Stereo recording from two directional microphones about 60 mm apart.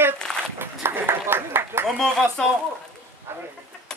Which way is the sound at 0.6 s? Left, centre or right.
Right.